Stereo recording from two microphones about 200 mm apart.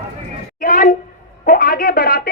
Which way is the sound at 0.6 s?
40° left (ahead or behind).